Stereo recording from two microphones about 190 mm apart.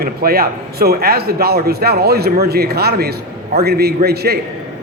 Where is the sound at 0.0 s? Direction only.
50° right (ahead or behind).